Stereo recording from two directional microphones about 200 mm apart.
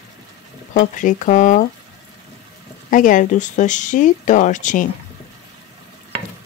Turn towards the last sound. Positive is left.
turn(degrees=40)  # may be behind; listen again after turning